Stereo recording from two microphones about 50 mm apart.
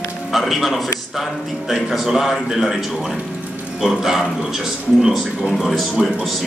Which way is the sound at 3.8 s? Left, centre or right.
Centre.